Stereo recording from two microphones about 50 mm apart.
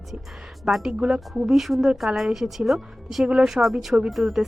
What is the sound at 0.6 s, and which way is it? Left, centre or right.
A woman's voice, centre.